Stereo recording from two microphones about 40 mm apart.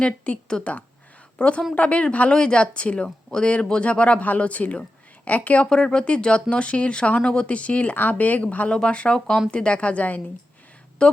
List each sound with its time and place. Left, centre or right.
0.3 s speech: left
2.3 s a woman's voice: left
5.6 s speech: left
7.9 s speech: left
8.7 s speech: left
9.1 s speech: centre
9.5 s speech: left
11.0 s speech: left